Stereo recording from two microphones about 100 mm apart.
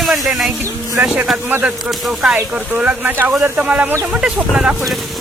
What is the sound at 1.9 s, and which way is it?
Speech, 5° right (ahead or behind).